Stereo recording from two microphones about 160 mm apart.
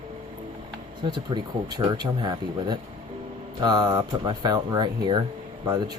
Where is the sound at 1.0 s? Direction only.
30° right (ahead or behind).